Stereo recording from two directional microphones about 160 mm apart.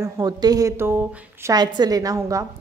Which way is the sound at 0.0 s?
25° right (ahead or behind).